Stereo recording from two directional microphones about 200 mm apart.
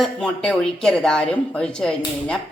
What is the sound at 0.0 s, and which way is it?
Speech, 5° left (ahead or behind).